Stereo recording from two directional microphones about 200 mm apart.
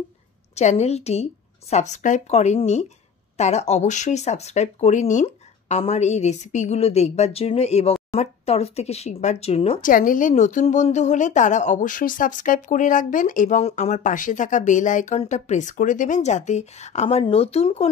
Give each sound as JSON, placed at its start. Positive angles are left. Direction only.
{"t": 0.6, "sound": "a woman's voice", "side_deg": 35}
{"t": 9.8, "sound": "a woman's voice", "side_deg": 45}